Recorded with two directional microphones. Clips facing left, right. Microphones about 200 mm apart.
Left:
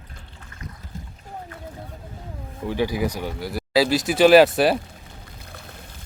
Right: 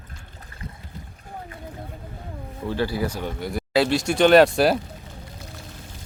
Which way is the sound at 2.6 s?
15° left (ahead or behind).